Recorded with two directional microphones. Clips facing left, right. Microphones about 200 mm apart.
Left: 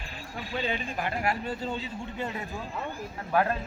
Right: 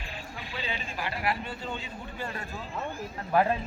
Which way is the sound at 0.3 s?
50° left (ahead or behind).